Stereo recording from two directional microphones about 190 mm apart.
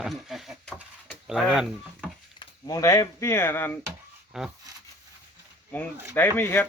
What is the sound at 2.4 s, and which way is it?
Speech, 20° left (ahead or behind).